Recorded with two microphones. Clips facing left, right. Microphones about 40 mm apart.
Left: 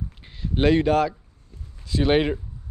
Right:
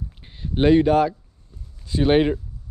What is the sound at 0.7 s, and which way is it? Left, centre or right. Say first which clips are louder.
Speech: right 3 dB; left.